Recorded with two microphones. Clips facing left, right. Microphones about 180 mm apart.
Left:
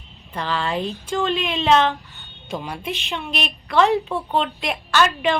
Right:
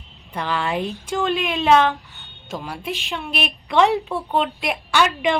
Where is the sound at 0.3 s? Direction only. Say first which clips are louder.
Right 1 dB; 10° right (ahead or behind).